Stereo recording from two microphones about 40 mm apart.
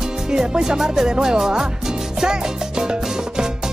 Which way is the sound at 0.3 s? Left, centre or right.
Centre.